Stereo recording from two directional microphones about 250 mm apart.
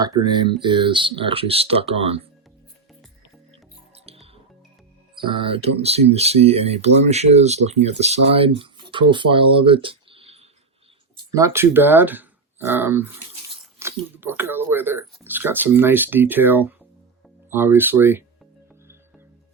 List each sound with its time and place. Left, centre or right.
0.0 s speech: centre
4.0 s music: right
5.1 s speech: right
11.2 s speech: centre